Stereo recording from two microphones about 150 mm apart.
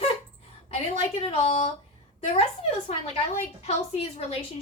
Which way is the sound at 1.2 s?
45° left (ahead or behind).